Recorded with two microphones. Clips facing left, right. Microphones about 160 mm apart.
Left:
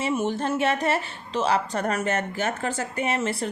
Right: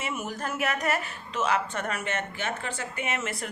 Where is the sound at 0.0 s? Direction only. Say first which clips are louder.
Left 8 dB; 30° left (ahead or behind).